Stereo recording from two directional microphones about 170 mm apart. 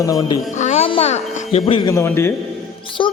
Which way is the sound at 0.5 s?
45° left (ahead or behind).